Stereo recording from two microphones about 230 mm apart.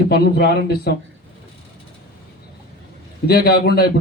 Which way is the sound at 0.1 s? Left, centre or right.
Left.